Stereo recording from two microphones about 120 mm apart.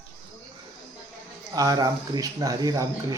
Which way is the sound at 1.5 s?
30° right (ahead or behind).